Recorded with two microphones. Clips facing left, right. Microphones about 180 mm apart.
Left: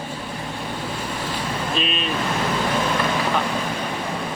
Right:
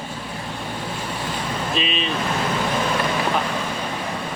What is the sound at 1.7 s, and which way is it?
Speech, centre (ahead or behind).